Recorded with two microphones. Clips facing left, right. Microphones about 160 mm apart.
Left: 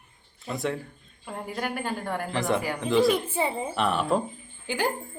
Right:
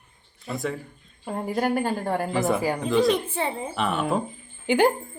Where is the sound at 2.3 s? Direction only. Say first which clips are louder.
Right 2 dB; 5° right (ahead or behind).